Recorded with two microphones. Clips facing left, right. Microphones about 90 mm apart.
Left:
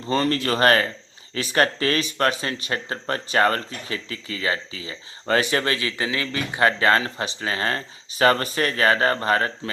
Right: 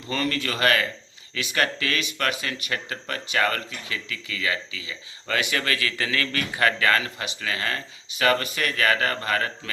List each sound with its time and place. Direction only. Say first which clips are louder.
0.0 s speech: left 5 dB; 35° left (ahead or behind)